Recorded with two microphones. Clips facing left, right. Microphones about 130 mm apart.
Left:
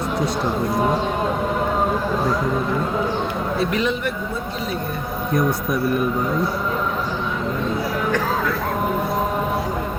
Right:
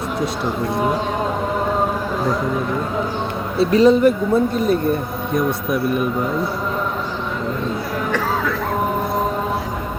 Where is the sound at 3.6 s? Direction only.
35° right (ahead or behind).